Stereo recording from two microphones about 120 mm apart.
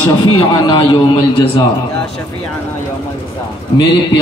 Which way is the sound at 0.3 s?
40° left (ahead or behind).